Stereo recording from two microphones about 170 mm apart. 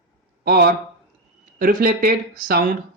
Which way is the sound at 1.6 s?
55° right (ahead or behind).